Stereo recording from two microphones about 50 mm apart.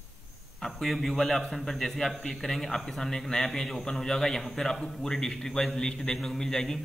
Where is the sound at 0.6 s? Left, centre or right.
Centre.